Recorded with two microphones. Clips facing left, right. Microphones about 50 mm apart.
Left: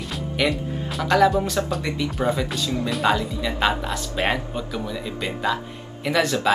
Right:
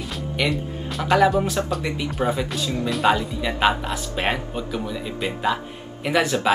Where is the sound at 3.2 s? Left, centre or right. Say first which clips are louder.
Right 1 dB; centre.